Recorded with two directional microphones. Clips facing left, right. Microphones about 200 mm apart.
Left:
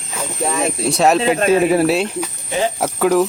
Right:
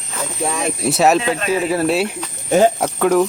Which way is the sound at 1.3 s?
50° left (ahead or behind).